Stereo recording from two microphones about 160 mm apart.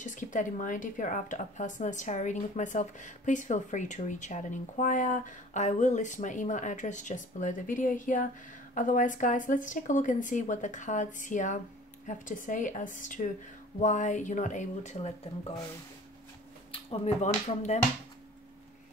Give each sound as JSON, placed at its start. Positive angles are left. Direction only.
{"t": 0.0, "sound": "speech", "side_deg": 50}
{"t": 16.7, "sound": "speech", "side_deg": 45}